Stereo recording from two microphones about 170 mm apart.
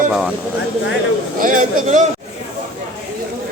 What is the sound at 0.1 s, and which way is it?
Speech, 5° right (ahead or behind).